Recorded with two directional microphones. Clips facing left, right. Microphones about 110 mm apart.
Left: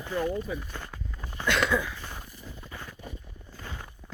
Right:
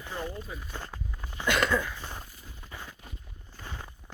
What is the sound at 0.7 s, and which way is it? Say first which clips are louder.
Walk: even; 15° right (ahead or behind).